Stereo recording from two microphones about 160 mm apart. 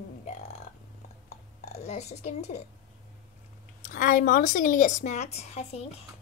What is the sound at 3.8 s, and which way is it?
A woman's voice, 55° left (ahead or behind).